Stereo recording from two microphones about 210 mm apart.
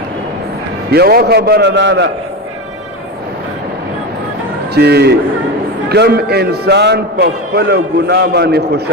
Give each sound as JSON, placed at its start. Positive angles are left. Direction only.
{"t": 0.9, "sound": "a man's voice", "side_deg": -50}
{"t": 4.7, "sound": "a man's voice", "side_deg": -50}